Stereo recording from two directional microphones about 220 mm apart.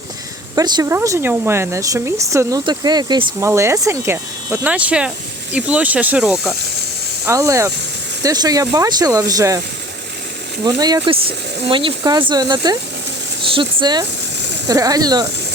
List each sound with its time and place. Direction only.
0.5 s speech: 15° right (ahead or behind)
7.3 s speech: 15° right (ahead or behind)
10.6 s speech: 20° right (ahead or behind)